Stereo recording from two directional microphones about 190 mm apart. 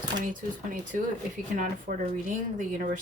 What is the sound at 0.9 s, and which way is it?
Speech, 45° right (ahead or behind).